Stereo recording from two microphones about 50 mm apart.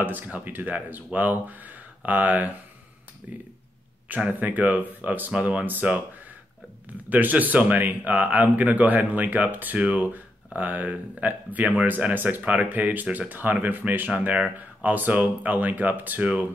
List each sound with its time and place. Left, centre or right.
0.0 s speech: right
7.1 s speech: right